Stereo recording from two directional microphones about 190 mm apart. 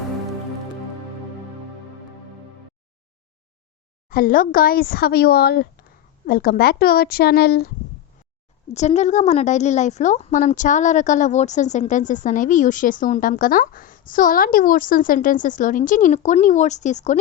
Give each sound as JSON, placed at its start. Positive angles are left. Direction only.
{"t": 4.1, "sound": "speech", "side_deg": 45}
{"t": 8.7, "sound": "a woman's voice", "side_deg": 35}